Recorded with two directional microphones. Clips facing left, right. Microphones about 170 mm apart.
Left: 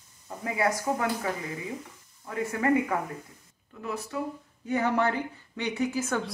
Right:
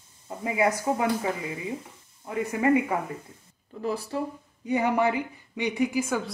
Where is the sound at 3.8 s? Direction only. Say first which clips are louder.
Right 4 dB; 30° right (ahead or behind).